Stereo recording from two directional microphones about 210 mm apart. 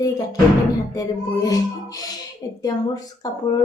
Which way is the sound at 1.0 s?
15° left (ahead or behind).